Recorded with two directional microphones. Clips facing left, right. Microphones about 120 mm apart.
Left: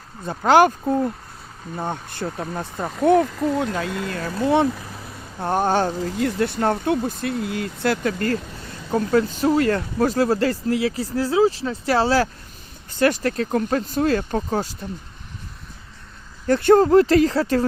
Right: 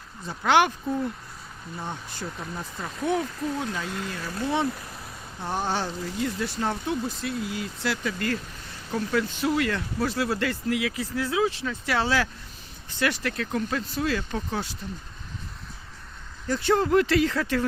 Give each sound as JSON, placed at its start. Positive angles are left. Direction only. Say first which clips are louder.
{"t": 0.3, "sound": "speech", "louder": "left 6 dB", "side_deg": 40}
{"t": 16.5, "sound": "speech", "louder": "left 9 dB", "side_deg": 55}
{"t": 16.8, "sound": "speech", "louder": "left 7 dB", "side_deg": 35}